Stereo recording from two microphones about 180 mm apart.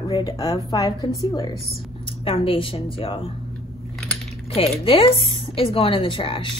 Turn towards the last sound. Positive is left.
turn(degrees=30)  # may be behind; listen again after turning